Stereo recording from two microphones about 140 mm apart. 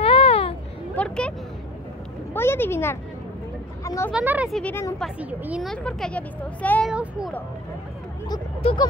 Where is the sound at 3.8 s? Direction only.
25° left (ahead or behind).